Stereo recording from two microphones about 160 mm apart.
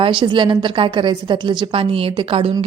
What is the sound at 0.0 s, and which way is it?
A woman's voice, 30° right (ahead or behind).